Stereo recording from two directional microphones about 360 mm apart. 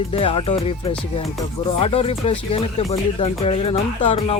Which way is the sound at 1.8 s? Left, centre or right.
Centre.